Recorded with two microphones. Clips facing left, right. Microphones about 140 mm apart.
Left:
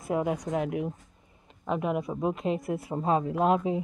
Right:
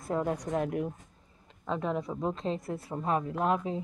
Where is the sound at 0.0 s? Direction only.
10° left (ahead or behind).